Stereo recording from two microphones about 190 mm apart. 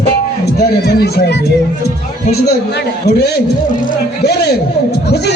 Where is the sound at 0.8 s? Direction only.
60° left (ahead or behind).